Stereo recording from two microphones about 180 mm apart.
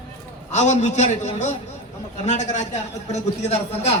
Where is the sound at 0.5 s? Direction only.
40° left (ahead or behind).